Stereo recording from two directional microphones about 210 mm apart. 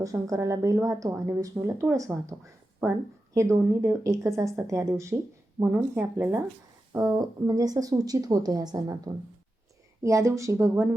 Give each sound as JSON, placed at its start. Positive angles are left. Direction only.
{"t": 0.0, "sound": "speech", "side_deg": -15}
{"t": 10.0, "sound": "speech", "side_deg": -15}